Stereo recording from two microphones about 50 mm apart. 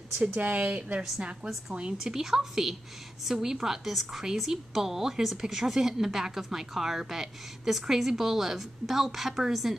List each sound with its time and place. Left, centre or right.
0.4 s a woman's voice: right; by 9.8 s centre